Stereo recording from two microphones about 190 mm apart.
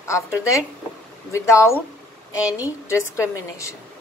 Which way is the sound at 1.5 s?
15° left (ahead or behind).